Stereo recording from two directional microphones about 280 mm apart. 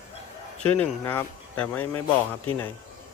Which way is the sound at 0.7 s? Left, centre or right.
Centre.